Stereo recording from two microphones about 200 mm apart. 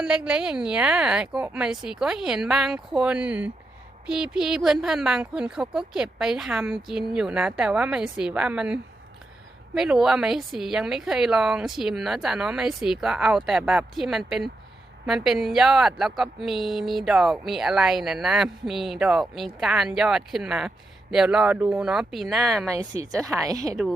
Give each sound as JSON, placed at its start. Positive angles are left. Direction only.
{"t": 0.0, "sound": "speech", "side_deg": -5}
{"t": 22.7, "sound": "a woman's voice", "side_deg": -15}